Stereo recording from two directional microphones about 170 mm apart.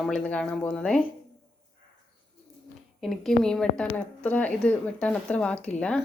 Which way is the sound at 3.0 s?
Centre (ahead or behind).